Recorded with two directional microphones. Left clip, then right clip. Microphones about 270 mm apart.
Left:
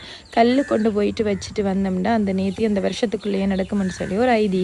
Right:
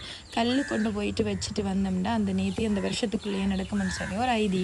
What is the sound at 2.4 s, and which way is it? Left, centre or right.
Speech, left.